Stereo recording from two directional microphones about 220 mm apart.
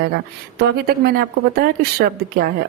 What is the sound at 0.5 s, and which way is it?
A woman's voice, 45° right (ahead or behind).